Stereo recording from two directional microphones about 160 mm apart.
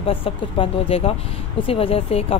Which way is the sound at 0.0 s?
35° left (ahead or behind).